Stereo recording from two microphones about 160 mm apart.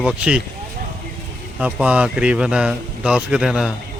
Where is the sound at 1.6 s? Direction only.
5° right (ahead or behind).